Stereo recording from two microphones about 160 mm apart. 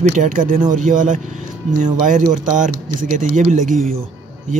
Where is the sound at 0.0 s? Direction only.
50° right (ahead or behind).